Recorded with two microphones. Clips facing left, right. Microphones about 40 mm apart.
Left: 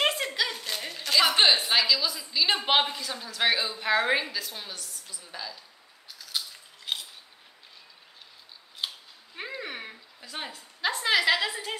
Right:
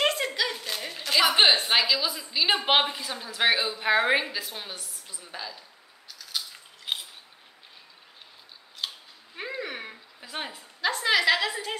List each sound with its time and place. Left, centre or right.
0.0 s a sound: centre
1.3 s a woman's voice: centre
6.0 s scissors: centre
6.5 s scissors: centre
8.7 s scissors: centre
10.2 s speech: centre
10.8 s a woman's voice: centre